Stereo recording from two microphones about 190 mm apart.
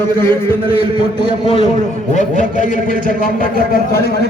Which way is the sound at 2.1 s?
40° left (ahead or behind).